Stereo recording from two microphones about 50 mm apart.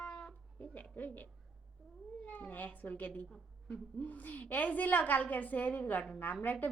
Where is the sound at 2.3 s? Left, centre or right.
Left.